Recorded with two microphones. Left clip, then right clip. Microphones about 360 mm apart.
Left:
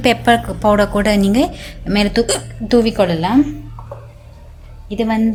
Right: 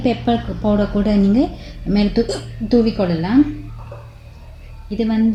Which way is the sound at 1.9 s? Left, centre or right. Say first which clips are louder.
Left 3 dB; left.